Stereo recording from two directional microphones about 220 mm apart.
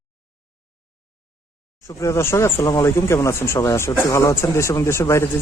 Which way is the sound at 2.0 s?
15° left (ahead or behind).